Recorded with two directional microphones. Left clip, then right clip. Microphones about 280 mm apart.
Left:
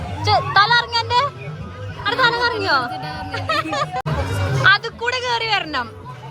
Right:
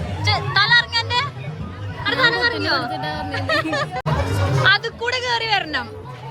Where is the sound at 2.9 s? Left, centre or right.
Right.